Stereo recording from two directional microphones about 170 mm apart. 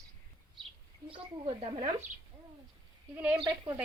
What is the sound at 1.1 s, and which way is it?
Speech, 30° right (ahead or behind).